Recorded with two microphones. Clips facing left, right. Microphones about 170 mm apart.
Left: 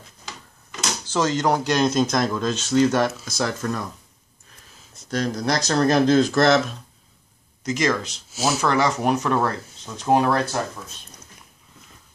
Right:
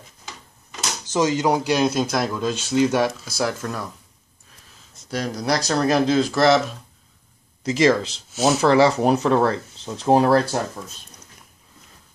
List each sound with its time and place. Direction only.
1.1 s speech: 15° right (ahead or behind)
5.1 s speech: 10° right (ahead or behind)
7.6 s speech: 30° right (ahead or behind)